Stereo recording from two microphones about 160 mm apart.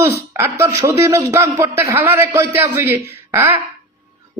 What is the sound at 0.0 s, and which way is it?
Speech, 15° right (ahead or behind).